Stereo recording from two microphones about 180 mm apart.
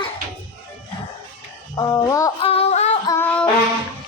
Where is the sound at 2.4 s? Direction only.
30° left (ahead or behind).